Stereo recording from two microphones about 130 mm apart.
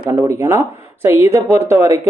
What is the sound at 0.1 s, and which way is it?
Speech, 20° right (ahead or behind).